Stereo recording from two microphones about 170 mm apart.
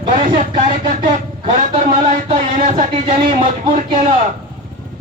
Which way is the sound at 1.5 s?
50° right (ahead or behind).